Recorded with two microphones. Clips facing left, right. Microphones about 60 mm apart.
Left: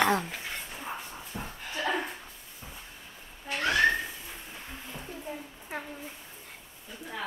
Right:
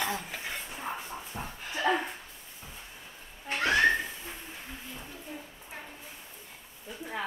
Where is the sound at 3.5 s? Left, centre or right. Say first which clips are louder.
Right 1 dB; centre.